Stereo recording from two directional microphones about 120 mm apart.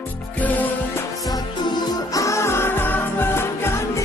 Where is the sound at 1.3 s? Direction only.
30° left (ahead or behind).